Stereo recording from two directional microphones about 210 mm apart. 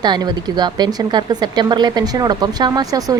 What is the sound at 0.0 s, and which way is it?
Speech, 20° right (ahead or behind).